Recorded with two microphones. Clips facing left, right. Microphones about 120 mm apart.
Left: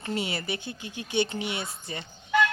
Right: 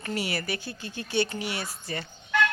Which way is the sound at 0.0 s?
20° left (ahead or behind).